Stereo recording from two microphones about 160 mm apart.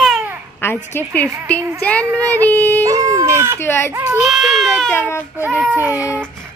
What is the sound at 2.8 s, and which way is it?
Speech, 20° right (ahead or behind).